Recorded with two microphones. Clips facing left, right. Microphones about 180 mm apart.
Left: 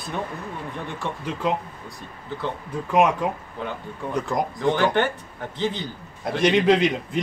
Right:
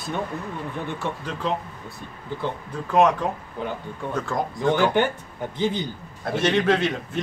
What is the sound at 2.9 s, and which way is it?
Speech, 10° left (ahead or behind).